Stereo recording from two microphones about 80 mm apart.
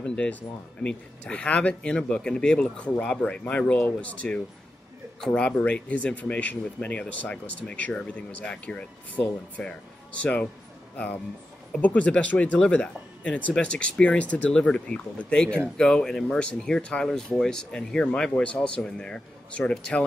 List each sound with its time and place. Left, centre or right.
0.0 s speech: centre
11.7 s speech: centre